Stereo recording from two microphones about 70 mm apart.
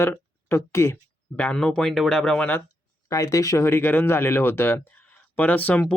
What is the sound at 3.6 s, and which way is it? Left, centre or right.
Speech, left.